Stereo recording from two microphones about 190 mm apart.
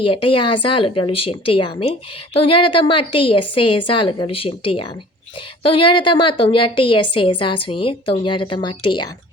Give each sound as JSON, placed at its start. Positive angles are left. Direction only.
{"t": 0.0, "sound": "a woman's voice", "side_deg": 25}